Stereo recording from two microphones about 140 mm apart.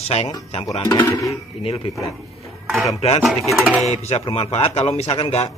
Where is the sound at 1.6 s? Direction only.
40° left (ahead or behind).